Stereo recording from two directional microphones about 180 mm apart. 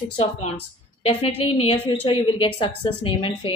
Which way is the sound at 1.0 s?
30° left (ahead or behind).